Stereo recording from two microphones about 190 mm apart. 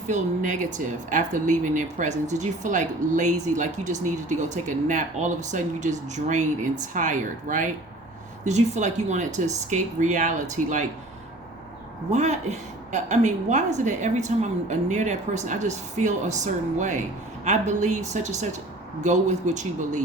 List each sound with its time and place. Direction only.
0.1 s speech: 40° right (ahead or behind)
12.1 s speech: 35° right (ahead or behind)